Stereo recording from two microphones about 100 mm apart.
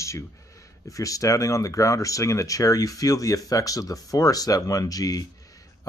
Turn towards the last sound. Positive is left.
turn(degrees=40)  # may be behind; listen again after turning